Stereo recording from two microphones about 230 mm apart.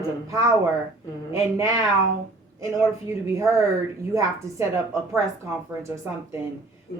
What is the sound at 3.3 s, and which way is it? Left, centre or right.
Speech, centre.